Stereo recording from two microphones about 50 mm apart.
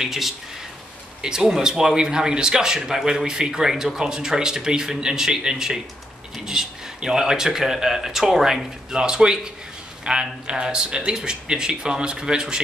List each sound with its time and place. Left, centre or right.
0.0 s speech: centre
8.9 s a man's voice: centre